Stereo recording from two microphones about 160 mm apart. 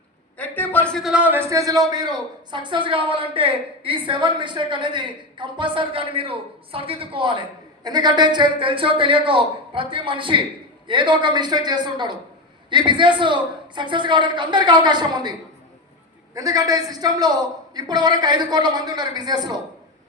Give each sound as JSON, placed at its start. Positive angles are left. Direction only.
{"t": 0.3, "sound": "a man's voice", "side_deg": 10}
{"t": 16.3, "sound": "a woman's voice", "side_deg": -20}